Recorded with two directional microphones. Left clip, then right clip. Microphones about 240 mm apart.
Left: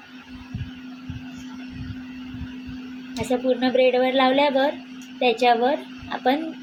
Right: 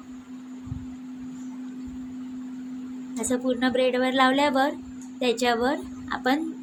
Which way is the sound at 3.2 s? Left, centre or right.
Centre.